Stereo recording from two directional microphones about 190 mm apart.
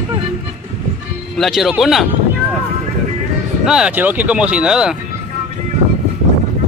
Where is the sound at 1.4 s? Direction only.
Centre (ahead or behind).